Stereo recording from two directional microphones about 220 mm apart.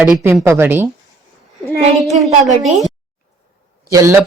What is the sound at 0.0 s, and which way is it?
Speech, 10° right (ahead or behind).